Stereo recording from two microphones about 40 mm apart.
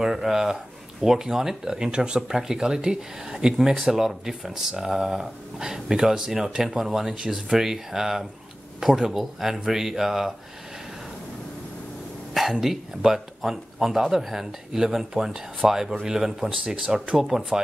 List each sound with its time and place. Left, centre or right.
0.0 s speech: centre
12.4 s speech: centre
16.4 s speech: right
17.3 s speech: centre